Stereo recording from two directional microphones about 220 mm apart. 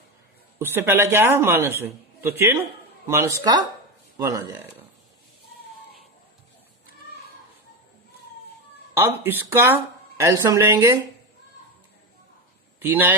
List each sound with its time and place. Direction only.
0.6 s speech: 10° right (ahead or behind)
9.0 s speech: 10° right (ahead or behind)
12.8 s speech: 10° right (ahead or behind)